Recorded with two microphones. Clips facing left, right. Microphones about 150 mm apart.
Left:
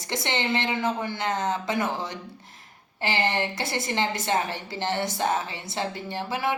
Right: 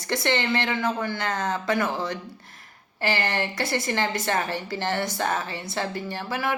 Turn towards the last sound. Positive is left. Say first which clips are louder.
# even
turn(degrees=20)  # may be behind; listen again after turning